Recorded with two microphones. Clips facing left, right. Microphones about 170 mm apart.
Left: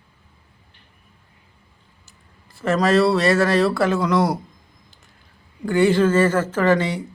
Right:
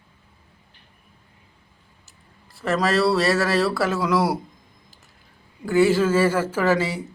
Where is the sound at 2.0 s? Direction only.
Centre (ahead or behind).